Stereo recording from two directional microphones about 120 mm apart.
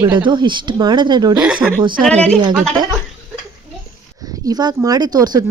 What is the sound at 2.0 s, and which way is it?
Speech, 10° left (ahead or behind).